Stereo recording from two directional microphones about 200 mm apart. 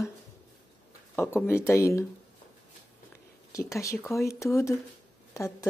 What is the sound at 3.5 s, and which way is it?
Speech, 15° left (ahead or behind).